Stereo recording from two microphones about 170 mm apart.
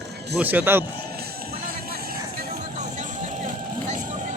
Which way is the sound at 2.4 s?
50° right (ahead or behind).